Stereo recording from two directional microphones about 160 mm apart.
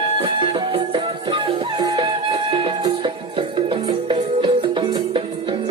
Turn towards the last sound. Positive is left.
turn(degrees=-30)  # may be behind; listen again after turning